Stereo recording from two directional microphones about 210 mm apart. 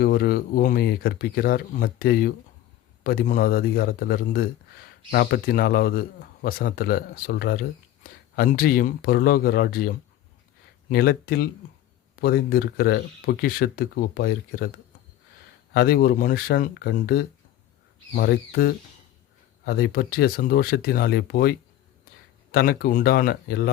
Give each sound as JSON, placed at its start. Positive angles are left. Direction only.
{"t": 0.0, "sound": "speech", "side_deg": 45}
{"t": 15.7, "sound": "speech", "side_deg": 45}
{"t": 22.5, "sound": "speech", "side_deg": 45}